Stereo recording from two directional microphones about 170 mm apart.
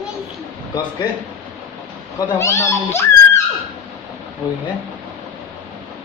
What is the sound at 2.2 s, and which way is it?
A child's voice, 15° left (ahead or behind).